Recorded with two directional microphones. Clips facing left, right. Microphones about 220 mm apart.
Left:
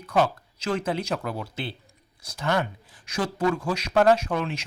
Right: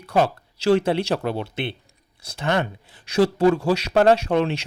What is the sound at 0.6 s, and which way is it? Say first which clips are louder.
Speech: right 8 dB; 70° right (ahead or behind).